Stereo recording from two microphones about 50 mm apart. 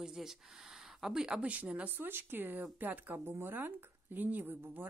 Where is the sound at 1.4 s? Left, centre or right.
Right.